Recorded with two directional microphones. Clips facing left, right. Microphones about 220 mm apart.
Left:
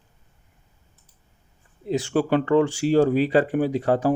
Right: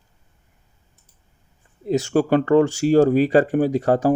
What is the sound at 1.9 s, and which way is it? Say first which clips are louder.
Speech: right 3 dB; 45° right (ahead or behind).